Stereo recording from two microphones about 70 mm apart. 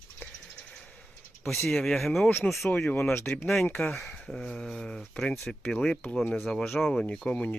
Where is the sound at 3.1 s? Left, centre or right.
Left.